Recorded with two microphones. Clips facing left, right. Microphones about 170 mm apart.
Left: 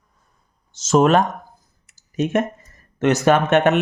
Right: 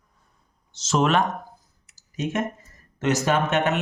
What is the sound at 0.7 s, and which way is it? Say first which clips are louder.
Speech: left 6 dB; 45° left (ahead or behind).